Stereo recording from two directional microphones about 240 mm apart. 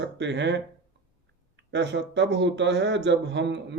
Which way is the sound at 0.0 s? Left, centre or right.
Right.